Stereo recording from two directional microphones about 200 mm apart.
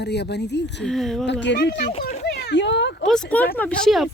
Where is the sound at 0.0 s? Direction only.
55° left (ahead or behind).